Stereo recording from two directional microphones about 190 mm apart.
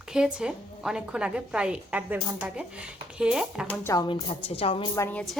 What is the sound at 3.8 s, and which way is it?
A woman's voice, 20° left (ahead or behind).